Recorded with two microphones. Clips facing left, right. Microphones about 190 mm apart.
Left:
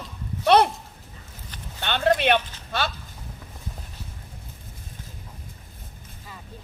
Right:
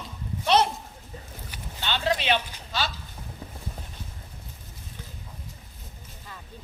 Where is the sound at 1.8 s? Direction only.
55° left (ahead or behind).